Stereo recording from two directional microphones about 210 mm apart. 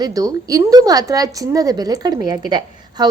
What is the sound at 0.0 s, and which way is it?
A woman's voice, 15° right (ahead or behind).